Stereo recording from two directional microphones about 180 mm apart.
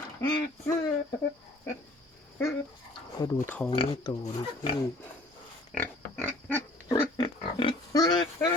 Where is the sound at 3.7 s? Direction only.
30° left (ahead or behind).